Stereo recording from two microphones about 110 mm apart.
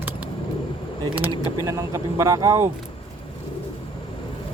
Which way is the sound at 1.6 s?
30° right (ahead or behind).